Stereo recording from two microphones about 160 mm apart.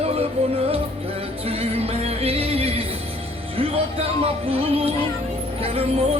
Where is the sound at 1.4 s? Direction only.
40° right (ahead or behind).